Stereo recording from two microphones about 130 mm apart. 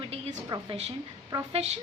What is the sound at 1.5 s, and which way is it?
Speech, 55° right (ahead or behind).